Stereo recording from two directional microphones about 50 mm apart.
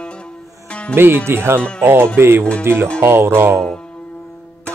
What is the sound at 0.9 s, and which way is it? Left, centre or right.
Speech, right.